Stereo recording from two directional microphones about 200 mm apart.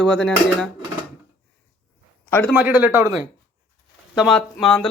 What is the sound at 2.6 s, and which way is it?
Speech, 10° right (ahead or behind).